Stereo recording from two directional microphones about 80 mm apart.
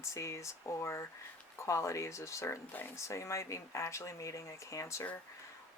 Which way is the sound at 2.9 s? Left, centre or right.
Left.